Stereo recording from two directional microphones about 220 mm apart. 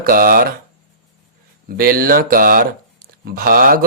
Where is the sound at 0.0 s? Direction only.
40° right (ahead or behind).